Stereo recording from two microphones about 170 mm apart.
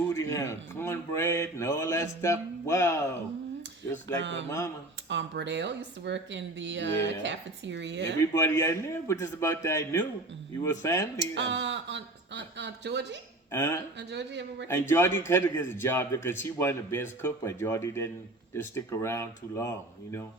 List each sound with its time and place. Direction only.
0.1 s a man's voice: 15° left (ahead or behind)
4.2 s speech: 90° right
4.4 s a man's voice: 15° left (ahead or behind)
5.0 s speech: 90° right
8.2 s a man's voice: 15° left (ahead or behind)
11.3 s speech: 90° right
13.5 s a man's voice: 15° left (ahead or behind)
14.1 s speech: 90° right
14.7 s a man's voice: 15° left (ahead or behind)